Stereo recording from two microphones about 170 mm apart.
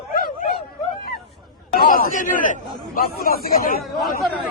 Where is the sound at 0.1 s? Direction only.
60° left (ahead or behind).